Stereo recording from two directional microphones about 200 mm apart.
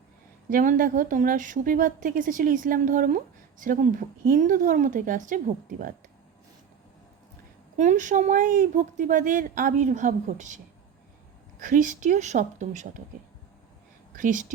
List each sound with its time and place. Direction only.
0.5 s a woman's voice: 40° right (ahead or behind)
7.8 s a woman's voice: 40° right (ahead or behind)
11.6 s a woman's voice: 40° right (ahead or behind)
14.2 s a woman's voice: 40° right (ahead or behind)